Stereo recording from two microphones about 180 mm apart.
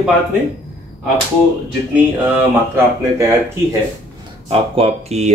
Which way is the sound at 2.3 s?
15° right (ahead or behind).